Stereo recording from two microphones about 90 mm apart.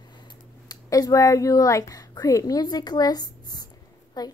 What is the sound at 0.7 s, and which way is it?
Speech, 45° left (ahead or behind).